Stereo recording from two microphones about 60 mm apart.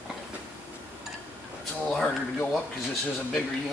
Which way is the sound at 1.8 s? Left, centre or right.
Centre.